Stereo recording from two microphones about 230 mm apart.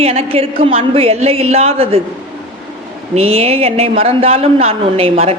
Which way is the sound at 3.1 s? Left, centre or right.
Right.